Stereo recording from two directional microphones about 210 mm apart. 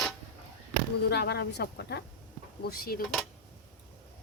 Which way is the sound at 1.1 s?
50° left (ahead or behind).